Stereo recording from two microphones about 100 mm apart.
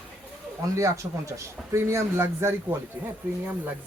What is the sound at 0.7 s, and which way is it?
A man's voice, 30° right (ahead or behind).